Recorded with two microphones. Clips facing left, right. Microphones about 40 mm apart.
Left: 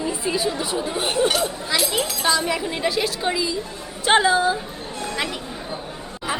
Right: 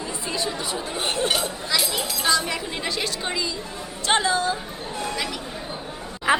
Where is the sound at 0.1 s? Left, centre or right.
Centre.